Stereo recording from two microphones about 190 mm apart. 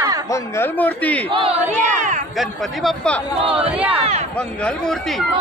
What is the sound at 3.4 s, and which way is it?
Speech, 30° right (ahead or behind).